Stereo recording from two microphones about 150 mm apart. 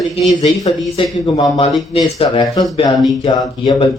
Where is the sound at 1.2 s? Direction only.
35° left (ahead or behind).